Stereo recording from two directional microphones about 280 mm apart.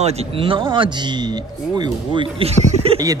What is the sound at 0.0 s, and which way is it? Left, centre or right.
Speech, right.